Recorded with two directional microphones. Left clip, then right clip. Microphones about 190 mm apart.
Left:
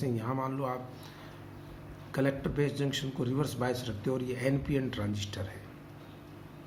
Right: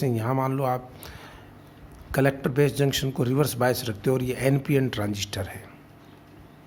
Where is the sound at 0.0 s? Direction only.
60° right (ahead or behind).